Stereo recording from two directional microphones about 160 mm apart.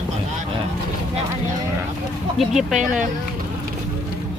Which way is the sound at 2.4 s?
Centre (ahead or behind).